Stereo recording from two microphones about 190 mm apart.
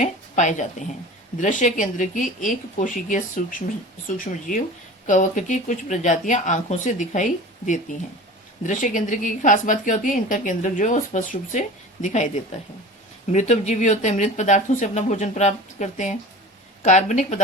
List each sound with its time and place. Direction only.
0.0 s a woman's voice: 40° left (ahead or behind)
5.0 s a woman's voice: 45° left (ahead or behind)